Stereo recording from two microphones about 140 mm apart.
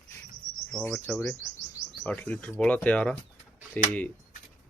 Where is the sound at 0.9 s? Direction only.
10° left (ahead or behind).